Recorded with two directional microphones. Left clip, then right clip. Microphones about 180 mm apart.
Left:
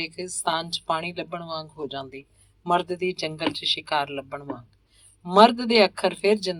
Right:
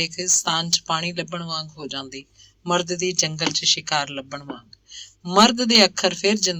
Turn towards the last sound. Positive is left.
turn(degrees=-10)  # may be behind; listen again after turning